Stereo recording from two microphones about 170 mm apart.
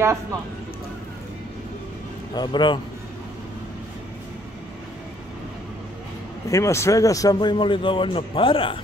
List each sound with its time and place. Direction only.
2.3 s a man's voice: 25° left (ahead or behind)
6.5 s a man's voice: 15° left (ahead or behind)